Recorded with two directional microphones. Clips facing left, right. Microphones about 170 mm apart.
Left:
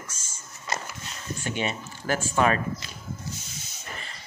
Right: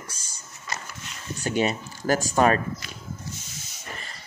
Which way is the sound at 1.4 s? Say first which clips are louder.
Right 6 dB; 40° right (ahead or behind).